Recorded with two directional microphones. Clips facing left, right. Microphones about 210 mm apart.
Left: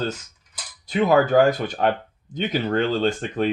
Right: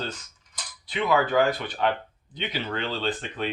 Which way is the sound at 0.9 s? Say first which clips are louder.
Left 6 dB; 45° left (ahead or behind).